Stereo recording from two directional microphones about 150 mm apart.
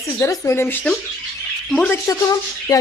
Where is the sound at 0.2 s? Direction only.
20° left (ahead or behind).